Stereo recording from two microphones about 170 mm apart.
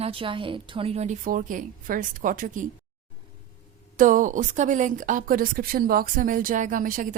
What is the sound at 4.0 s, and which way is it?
A woman's voice, 50° right (ahead or behind).